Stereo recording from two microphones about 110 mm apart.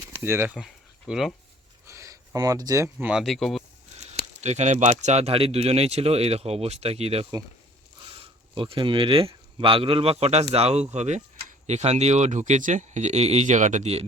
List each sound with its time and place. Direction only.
0.2 s speech: 20° right (ahead or behind)
0.5 s speech: 5° right (ahead or behind)
1.9 s a sound: 30° right (ahead or behind)
3.0 s speech: 5° right (ahead or behind)
4.1 s speech: 90° right; by 7.3 s 65° right (ahead or behind)
8.5 s a man's voice: 50° right (ahead or behind); by 10.8 s 70° right (ahead or behind)
10.9 s speech: 90° right